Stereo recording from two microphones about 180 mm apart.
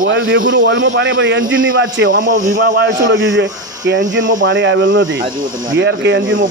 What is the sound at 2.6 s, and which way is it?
Speech, 70° right (ahead or behind).